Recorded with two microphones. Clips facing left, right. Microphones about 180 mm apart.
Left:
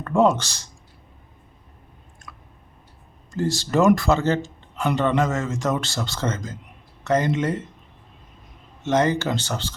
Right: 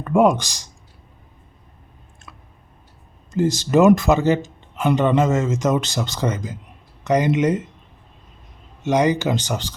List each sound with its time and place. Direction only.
0.0 s speech: 15° right (ahead or behind)
3.3 s speech: 20° right (ahead or behind)
8.8 s speech: 10° right (ahead or behind)